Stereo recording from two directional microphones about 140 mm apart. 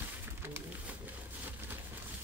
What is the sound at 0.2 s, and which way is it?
Pigeon, 15° right (ahead or behind).